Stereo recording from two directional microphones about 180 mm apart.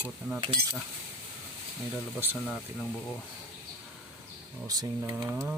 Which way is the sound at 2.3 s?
Centre (ahead or behind).